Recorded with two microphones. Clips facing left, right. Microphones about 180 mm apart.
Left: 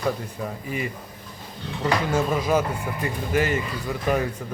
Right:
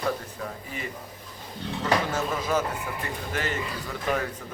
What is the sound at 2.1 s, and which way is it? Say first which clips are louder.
Speech: left 5 dB; 10° left (ahead or behind).